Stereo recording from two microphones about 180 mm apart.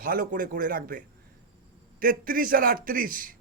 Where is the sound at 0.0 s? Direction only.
50° right (ahead or behind).